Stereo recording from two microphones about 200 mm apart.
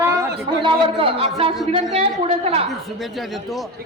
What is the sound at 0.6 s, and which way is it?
A man's voice, 25° right (ahead or behind).